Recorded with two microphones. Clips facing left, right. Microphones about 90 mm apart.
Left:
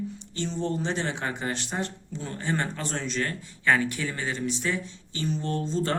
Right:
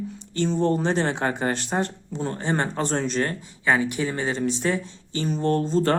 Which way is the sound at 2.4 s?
30° right (ahead or behind).